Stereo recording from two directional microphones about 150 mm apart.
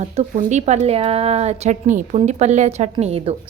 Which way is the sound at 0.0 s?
55° right (ahead or behind).